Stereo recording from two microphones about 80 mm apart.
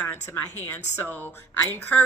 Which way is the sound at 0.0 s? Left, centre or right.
Left.